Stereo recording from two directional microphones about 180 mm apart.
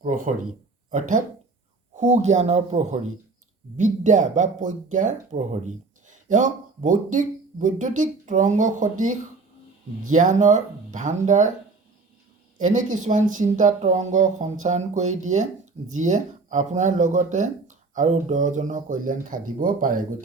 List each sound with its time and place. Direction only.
0.0 s speech: 50° right (ahead or behind)
12.5 s speech: 45° right (ahead or behind)